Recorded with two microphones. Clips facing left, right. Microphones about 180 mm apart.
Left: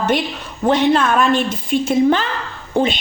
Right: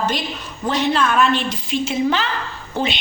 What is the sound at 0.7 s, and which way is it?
A woman's voice, 50° left (ahead or behind).